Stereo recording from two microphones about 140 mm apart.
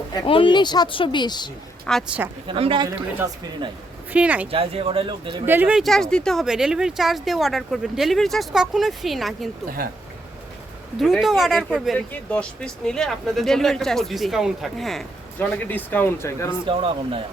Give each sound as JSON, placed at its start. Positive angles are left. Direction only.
{"t": 0.1, "sound": "a woman's voice", "side_deg": 35}
{"t": 1.9, "sound": "speech", "side_deg": 5}
{"t": 2.5, "sound": "speech", "side_deg": -40}
{"t": 4.1, "sound": "speech", "side_deg": -10}
{"t": 4.5, "sound": "speech", "side_deg": -45}
{"t": 5.5, "sound": "speech", "side_deg": -10}
{"t": 5.8, "sound": "speech", "side_deg": 5}
{"t": 11.0, "sound": "speech", "side_deg": 0}
{"t": 11.9, "sound": "speech", "side_deg": 10}
{"t": 15.4, "sound": "speech", "side_deg": 10}
{"t": 16.6, "sound": "speech", "side_deg": -40}